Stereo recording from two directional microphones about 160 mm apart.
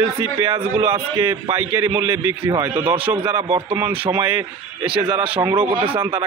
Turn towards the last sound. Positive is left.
turn(degrees=-30)  # may be behind; listen again after turning